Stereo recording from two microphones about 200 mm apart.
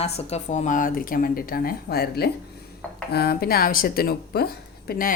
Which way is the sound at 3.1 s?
50° left (ahead or behind).